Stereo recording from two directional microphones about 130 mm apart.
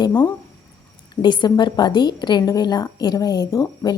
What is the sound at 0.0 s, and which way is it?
A woman's voice, 35° left (ahead or behind).